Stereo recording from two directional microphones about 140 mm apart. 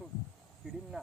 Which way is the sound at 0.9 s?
10° right (ahead or behind).